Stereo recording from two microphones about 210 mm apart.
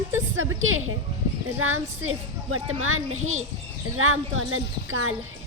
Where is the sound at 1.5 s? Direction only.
75° right (ahead or behind).